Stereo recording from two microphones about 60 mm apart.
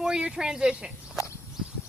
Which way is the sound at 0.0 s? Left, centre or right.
Centre.